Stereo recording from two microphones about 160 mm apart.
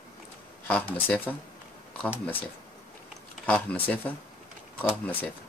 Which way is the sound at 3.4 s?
10° left (ahead or behind).